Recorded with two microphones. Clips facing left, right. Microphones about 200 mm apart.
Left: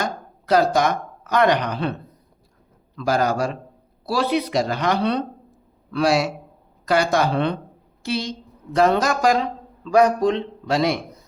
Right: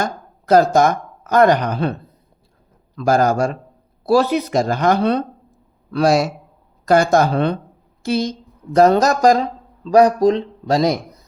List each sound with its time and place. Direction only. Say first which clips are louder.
0.0 s speech: right 3 dB; 45° right (ahead or behind)